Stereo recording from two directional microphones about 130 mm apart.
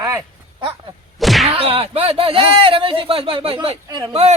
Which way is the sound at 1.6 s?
50° right (ahead or behind).